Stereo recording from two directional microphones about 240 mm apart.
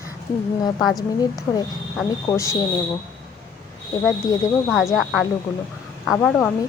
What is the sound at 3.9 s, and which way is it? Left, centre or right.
Speech, centre.